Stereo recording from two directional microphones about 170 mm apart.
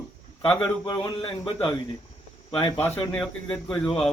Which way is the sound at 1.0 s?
30° left (ahead or behind).